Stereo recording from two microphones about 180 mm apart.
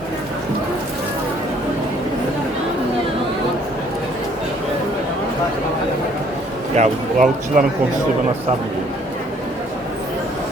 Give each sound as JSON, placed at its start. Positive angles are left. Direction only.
{"t": 6.7, "sound": "speech", "side_deg": -45}